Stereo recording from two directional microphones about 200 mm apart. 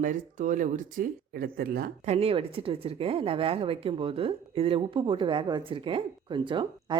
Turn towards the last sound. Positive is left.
turn(degrees=-25)  # may be behind; listen again after turning